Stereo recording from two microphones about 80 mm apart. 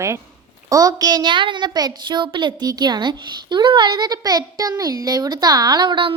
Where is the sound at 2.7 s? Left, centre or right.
Right.